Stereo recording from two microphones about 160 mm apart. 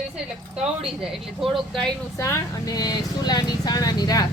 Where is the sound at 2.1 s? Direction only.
20° left (ahead or behind).